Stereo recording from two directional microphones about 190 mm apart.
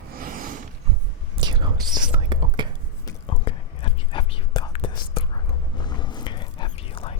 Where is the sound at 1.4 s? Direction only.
25° right (ahead or behind).